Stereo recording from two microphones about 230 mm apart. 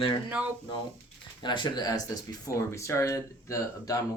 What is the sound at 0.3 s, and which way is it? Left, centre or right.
Speech, centre.